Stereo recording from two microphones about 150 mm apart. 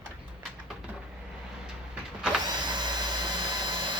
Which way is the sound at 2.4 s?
30° right (ahead or behind).